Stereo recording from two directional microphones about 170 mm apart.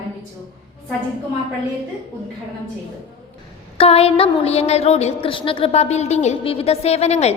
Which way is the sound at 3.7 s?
35° left (ahead or behind).